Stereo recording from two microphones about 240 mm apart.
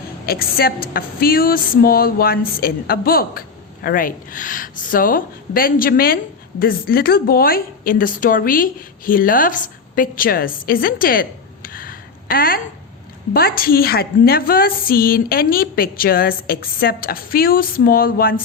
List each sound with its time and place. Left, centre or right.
0.3 s a woman's voice: left